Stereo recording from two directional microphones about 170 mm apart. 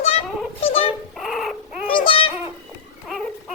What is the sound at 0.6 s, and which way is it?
Dog, 35° left (ahead or behind).